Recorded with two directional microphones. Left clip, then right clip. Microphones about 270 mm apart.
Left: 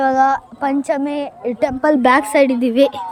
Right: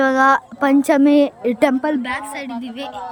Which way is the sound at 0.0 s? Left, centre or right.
Centre.